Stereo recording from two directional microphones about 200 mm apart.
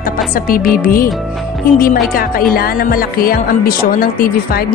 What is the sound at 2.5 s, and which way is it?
Speech, 45° left (ahead or behind).